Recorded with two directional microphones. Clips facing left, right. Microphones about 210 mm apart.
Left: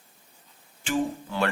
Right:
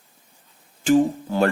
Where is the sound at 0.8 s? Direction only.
40° right (ahead or behind).